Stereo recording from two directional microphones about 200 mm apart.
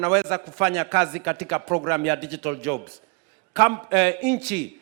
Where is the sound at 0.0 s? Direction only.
5° left (ahead or behind).